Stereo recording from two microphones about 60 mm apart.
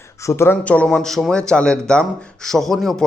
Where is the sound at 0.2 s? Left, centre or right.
Left.